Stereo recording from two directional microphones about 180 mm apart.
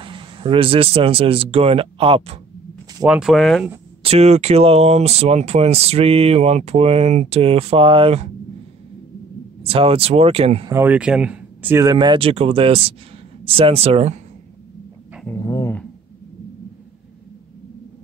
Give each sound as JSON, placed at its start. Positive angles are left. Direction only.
{"t": 0.0, "sound": "speech", "side_deg": -30}
{"t": 3.1, "sound": "speech", "side_deg": 0}
{"t": 4.0, "sound": "speech", "side_deg": -35}
{"t": 9.6, "sound": "speech", "side_deg": -30}
{"t": 10.7, "sound": "speech", "side_deg": -10}
{"t": 15.2, "sound": "dog", "side_deg": 20}